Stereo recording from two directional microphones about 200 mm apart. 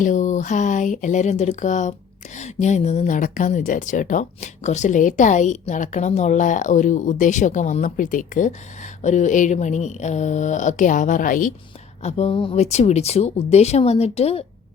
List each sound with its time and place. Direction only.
0.0 s speech: 40° left (ahead or behind)